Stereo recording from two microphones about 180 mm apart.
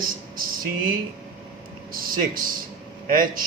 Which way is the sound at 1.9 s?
50° right (ahead or behind).